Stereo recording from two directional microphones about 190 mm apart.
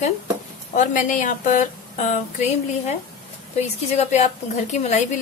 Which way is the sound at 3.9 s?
35° left (ahead or behind).